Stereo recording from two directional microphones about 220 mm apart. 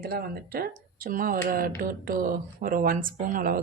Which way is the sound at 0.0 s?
45° right (ahead or behind).